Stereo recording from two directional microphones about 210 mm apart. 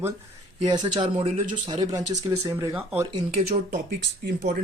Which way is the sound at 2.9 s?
30° right (ahead or behind).